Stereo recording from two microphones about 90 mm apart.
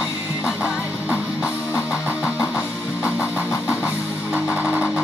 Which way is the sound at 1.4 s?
30° left (ahead or behind).